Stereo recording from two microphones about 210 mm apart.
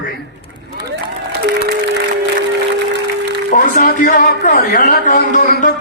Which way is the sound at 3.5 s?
40° left (ahead or behind).